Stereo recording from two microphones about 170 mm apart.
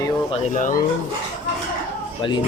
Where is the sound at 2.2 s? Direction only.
30° left (ahead or behind).